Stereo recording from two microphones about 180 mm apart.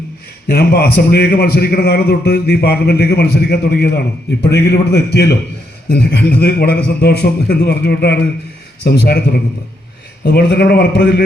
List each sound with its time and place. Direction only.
0.4 s a man's voice: 60° left (ahead or behind)